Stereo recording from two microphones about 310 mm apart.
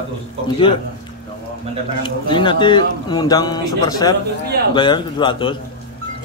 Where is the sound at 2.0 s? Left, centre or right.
Centre.